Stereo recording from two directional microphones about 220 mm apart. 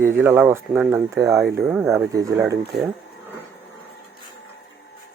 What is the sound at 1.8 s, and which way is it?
Speech, 10° right (ahead or behind).